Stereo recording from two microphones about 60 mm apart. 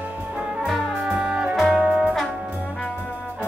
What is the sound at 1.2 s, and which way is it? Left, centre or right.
Music, centre.